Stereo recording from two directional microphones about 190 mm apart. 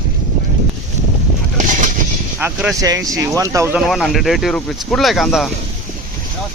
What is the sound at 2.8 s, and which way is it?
Speech, 20° right (ahead or behind).